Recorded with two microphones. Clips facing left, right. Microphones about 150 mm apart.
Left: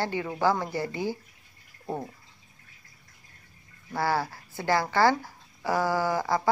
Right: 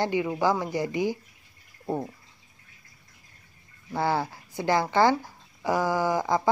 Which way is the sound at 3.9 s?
20° right (ahead or behind).